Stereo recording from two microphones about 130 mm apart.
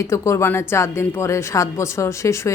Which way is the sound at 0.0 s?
20° left (ahead or behind).